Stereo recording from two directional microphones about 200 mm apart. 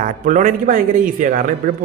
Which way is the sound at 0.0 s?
40° right (ahead or behind).